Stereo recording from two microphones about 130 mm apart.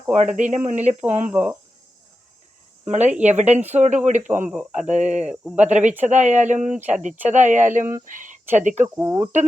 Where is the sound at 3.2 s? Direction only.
60° right (ahead or behind).